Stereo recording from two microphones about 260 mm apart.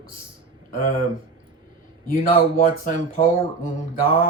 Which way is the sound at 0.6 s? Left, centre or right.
Left.